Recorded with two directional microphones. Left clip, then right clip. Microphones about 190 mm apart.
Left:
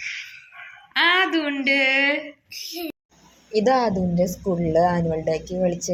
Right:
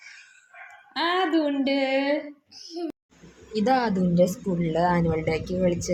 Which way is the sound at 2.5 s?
10° left (ahead or behind).